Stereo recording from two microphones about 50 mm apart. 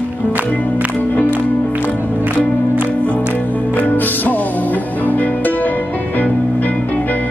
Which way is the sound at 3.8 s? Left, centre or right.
Left.